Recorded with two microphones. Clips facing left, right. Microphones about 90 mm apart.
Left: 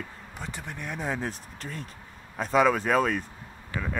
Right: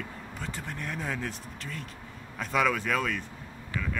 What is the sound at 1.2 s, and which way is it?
Speech, 35° left (ahead or behind).